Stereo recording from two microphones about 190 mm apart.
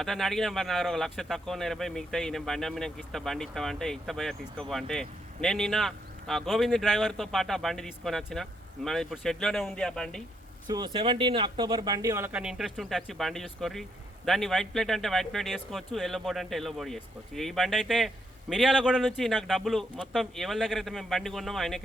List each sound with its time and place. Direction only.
0.0 s speech: centre (ahead or behind)
10.7 s speech: 20° right (ahead or behind); by 21.8 s centre (ahead or behind)